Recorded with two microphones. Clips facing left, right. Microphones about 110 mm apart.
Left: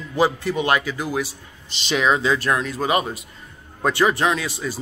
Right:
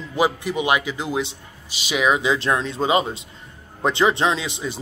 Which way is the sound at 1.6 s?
10° right (ahead or behind).